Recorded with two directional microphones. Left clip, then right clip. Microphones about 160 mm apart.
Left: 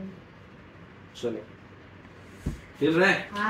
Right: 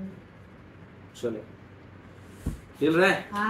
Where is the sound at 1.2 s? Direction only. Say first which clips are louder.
Even; 5° left (ahead or behind).